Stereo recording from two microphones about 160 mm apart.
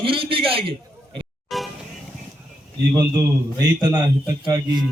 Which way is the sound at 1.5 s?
Centre (ahead or behind).